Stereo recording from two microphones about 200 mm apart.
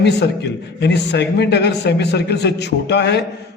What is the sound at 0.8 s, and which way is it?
A man's voice, 60° left (ahead or behind).